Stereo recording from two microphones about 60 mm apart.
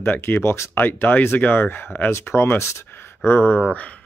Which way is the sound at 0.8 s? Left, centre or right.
Left.